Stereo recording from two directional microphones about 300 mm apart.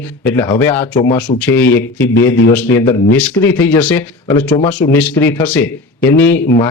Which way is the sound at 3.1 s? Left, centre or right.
Centre.